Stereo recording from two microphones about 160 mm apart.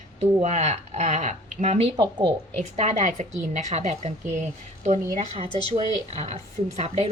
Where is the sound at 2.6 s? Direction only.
45° right (ahead or behind).